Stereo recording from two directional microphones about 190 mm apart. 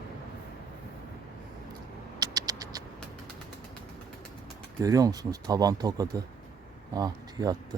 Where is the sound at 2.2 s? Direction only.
20° right (ahead or behind).